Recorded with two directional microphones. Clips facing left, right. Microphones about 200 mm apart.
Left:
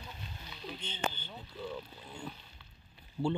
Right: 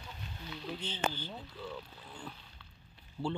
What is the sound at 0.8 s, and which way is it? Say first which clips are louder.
Speech: right 1 dB; 5° right (ahead or behind).